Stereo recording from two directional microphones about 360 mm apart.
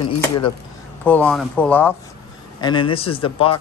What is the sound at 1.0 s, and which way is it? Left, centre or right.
Speech, centre.